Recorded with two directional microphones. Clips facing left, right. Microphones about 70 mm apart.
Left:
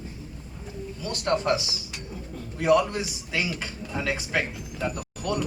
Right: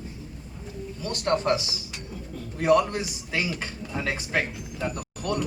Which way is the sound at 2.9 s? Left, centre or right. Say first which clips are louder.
Even; right.